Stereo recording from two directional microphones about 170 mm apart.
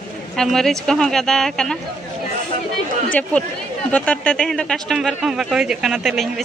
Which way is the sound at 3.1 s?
10° left (ahead or behind).